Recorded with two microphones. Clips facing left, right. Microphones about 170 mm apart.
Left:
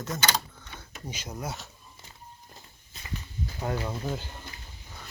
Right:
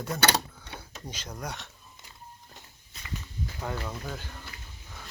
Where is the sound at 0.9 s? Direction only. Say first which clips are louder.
Left 4 dB; 10° left (ahead or behind).